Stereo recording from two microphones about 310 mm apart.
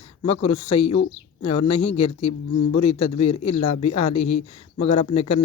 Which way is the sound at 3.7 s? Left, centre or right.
Left.